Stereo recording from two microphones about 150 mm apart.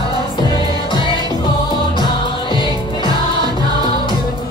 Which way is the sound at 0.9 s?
30° left (ahead or behind).